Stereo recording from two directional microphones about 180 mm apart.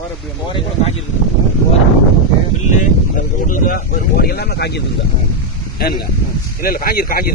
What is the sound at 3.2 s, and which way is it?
Speech, 45° left (ahead or behind).